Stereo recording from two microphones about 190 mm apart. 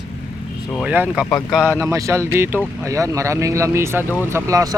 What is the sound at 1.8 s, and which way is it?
Speech, 15° right (ahead or behind).